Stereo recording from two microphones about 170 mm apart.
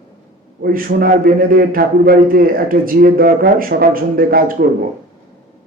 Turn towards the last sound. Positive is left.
turn(degrees=-60)  # may be behind; listen again after turning